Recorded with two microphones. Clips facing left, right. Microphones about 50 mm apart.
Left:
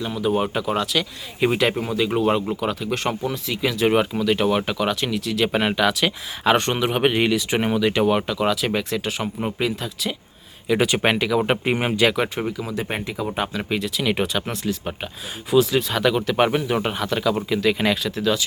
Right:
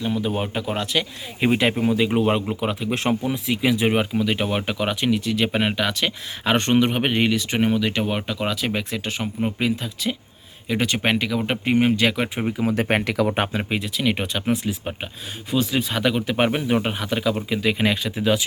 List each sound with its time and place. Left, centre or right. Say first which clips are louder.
0.0 s speech: left 2 dB; centre
1.7 s speech: right 2 dB; centre
12.5 s speech: right 6 dB; right
13.2 s speech: right 3 dB; right
13.6 s speech: even; centre
18.2 s speech: right 3 dB; right